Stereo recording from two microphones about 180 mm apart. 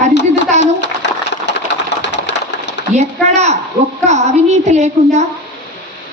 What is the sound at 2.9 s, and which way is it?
A woman's voice, 40° right (ahead or behind).